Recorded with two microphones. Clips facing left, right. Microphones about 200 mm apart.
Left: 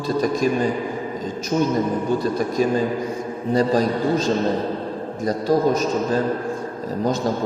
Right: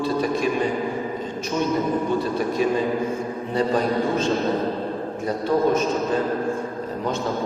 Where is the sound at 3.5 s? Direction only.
40° left (ahead or behind).